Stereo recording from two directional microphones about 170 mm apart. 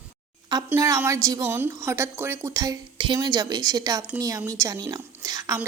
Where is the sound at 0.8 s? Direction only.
20° right (ahead or behind).